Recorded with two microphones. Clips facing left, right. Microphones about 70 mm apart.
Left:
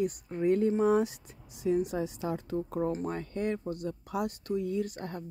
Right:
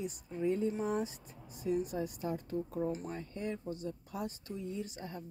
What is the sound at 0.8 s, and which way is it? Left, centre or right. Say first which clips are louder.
Speech: left 9 dB; left.